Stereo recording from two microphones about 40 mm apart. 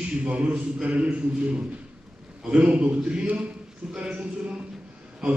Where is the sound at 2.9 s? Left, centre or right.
Right.